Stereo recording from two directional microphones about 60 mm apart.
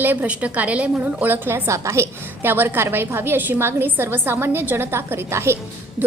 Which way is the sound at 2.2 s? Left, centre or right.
Right.